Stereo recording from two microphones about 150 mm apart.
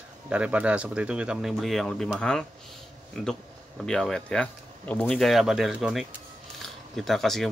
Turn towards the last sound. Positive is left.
turn(degrees=0)  # may be behind; listen again after turning